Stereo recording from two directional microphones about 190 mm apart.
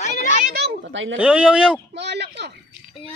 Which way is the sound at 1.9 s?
65° right (ahead or behind).